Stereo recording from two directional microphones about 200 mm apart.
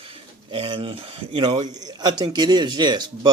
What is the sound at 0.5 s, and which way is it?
A man's voice, 25° right (ahead or behind).